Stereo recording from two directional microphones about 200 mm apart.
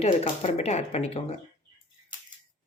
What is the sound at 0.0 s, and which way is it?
Speech, 35° left (ahead or behind).